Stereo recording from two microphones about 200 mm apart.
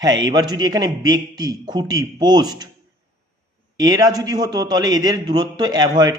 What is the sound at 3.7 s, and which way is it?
A man's voice, 20° right (ahead or behind).